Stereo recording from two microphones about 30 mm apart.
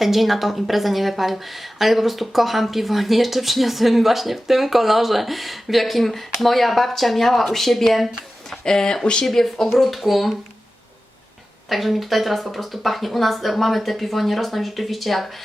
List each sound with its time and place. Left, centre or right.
0.0 s a woman's voice: centre
8.4 s speech: centre
9.2 s a woman's voice: centre
11.7 s a woman's voice: centre